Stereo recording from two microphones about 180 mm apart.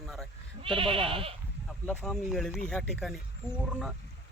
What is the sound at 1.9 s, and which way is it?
Speech, 5° left (ahead or behind).